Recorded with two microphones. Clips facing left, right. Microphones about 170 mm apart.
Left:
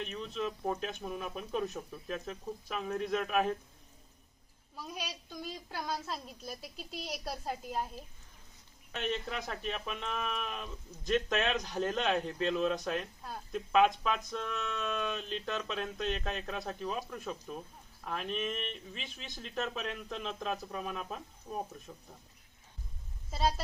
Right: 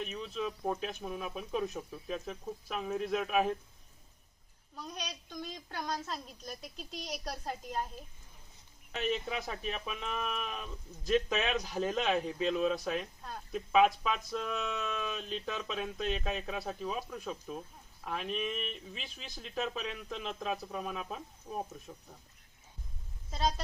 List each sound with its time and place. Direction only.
0.0 s speech: 5° right (ahead or behind)
4.7 s speech: 5° left (ahead or behind)
23.3 s speech: 5° left (ahead or behind)